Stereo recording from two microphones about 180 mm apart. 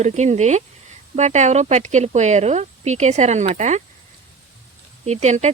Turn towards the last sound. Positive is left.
turn(degrees=-40)  # may be behind; listen again after turning